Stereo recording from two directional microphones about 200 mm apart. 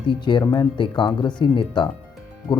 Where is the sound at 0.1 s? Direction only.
25° left (ahead or behind).